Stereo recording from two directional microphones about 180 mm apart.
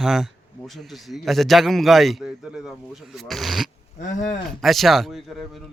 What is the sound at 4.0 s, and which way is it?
Speech, 40° left (ahead or behind).